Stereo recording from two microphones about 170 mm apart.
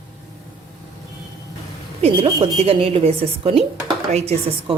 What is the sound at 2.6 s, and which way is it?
A woman's voice, 35° right (ahead or behind).